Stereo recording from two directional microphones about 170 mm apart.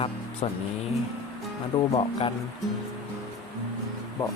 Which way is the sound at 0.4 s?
35° left (ahead or behind).